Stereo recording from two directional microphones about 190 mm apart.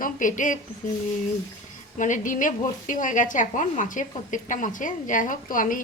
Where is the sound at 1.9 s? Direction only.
40° left (ahead or behind).